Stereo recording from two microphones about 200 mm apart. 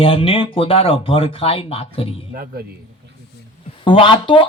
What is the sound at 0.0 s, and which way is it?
Speech, 30° left (ahead or behind).